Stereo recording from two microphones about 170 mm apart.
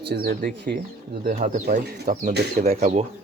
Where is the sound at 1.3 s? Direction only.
50° right (ahead or behind).